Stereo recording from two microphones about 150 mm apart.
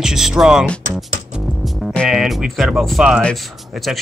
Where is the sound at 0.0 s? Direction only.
5° right (ahead or behind).